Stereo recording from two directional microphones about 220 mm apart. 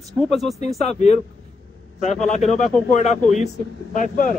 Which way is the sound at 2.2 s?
35° left (ahead or behind).